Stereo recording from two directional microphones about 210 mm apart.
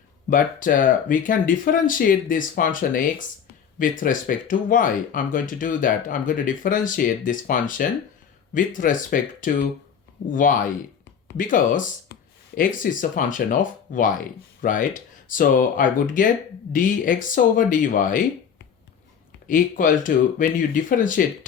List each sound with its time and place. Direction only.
0.3 s speech: 40° left (ahead or behind)
19.5 s speech: 40° left (ahead or behind)